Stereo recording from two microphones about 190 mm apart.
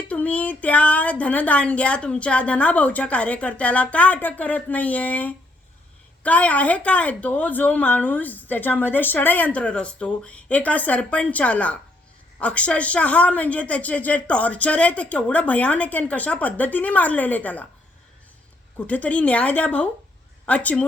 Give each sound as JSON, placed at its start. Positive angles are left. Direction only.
{"t": 0.1, "sound": "a sound", "side_deg": 5}
{"t": 1.2, "sound": "a woman's voice", "side_deg": 5}
{"t": 18.9, "sound": "a woman's voice", "side_deg": 5}